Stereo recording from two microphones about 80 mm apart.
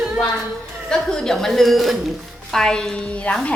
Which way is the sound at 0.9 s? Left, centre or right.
Centre.